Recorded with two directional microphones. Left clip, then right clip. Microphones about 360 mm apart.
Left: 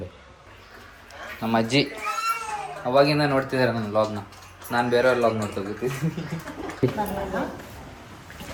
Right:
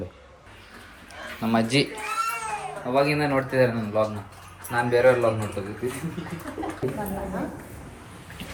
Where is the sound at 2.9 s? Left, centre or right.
Centre.